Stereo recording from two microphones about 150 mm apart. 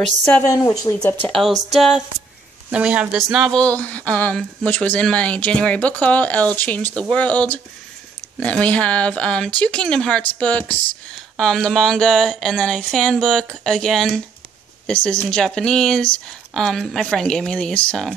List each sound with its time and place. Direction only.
0.0 s speech: 5° left (ahead or behind)
0.5 s speech: 20° left (ahead or behind)
0.9 s speech: 10° left (ahead or behind)